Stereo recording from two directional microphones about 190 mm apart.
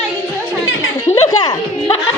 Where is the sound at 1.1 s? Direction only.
20° left (ahead or behind).